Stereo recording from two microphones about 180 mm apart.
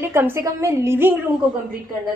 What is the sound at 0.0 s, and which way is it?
A woman's voice, 15° right (ahead or behind).